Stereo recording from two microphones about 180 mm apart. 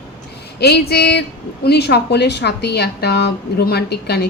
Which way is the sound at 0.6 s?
65° left (ahead or behind).